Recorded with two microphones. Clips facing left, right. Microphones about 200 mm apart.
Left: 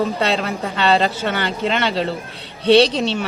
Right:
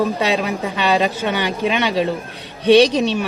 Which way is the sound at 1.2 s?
15° right (ahead or behind).